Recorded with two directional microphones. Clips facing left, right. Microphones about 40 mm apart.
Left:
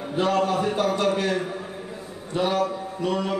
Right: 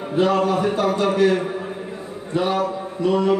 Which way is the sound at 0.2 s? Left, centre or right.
Centre.